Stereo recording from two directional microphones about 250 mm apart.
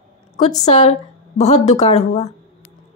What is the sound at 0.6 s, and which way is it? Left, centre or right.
Speech, left.